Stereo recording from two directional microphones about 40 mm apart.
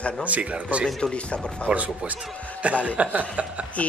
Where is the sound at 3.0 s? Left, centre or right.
Right.